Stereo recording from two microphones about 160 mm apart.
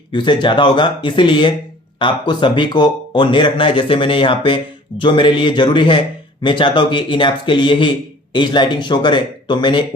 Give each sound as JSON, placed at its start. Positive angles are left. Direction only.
{"t": 0.1, "sound": "speech", "side_deg": 30}